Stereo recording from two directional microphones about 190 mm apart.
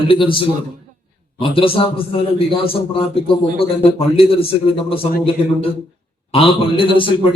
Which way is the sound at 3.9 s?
30° left (ahead or behind).